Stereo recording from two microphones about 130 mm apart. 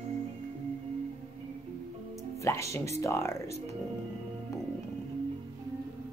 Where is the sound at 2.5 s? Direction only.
20° left (ahead or behind).